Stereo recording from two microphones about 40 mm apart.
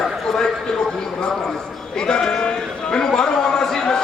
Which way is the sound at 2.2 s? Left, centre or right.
Left.